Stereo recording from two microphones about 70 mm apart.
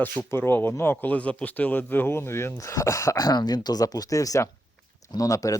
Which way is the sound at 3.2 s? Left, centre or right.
Left.